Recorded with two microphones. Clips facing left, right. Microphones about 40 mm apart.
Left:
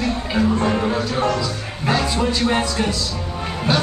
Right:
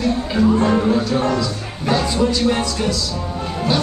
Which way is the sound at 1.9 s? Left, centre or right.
Centre.